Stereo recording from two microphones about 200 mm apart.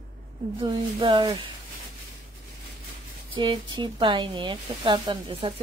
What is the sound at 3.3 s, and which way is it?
Speech, 25° right (ahead or behind).